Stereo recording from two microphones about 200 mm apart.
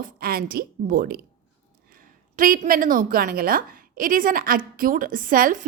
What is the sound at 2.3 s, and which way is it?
A woman's voice, 45° right (ahead or behind).